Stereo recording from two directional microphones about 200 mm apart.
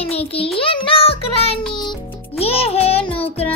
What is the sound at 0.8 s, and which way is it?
Music, 30° left (ahead or behind).